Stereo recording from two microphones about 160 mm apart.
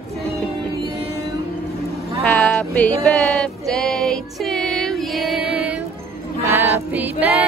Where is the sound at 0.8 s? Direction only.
40° right (ahead or behind).